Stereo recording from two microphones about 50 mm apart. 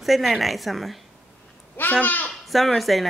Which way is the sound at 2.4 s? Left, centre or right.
Centre.